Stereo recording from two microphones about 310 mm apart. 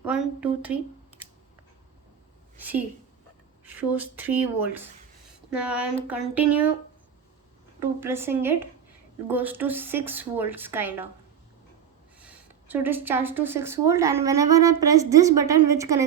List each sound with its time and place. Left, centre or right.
0.0 s a sound: centre
2.6 s a woman's voice: centre
7.8 s speech: centre
12.2 s speech: centre